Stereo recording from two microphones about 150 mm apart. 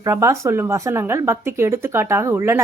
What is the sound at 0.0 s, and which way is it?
Speech, 20° right (ahead or behind).